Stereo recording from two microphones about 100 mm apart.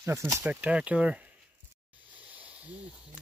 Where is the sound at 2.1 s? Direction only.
15° right (ahead or behind).